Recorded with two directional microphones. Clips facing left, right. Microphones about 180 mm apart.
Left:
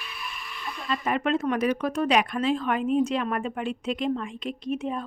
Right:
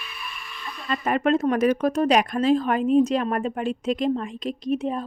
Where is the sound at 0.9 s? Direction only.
45° right (ahead or behind).